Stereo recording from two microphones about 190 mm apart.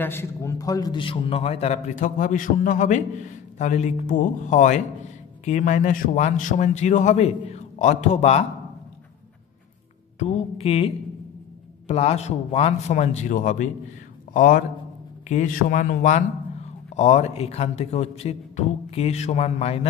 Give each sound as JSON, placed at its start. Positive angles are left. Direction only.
{"t": 0.0, "sound": "a man's voice", "side_deg": 15}
{"t": 10.1, "sound": "a woman's voice", "side_deg": 35}
{"t": 11.9, "sound": "a man's voice", "side_deg": 35}